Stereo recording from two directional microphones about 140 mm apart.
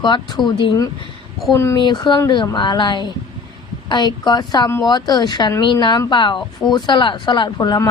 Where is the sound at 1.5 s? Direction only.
20° left (ahead or behind).